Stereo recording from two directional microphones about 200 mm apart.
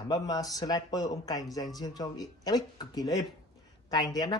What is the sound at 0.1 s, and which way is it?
Speech, 20° left (ahead or behind).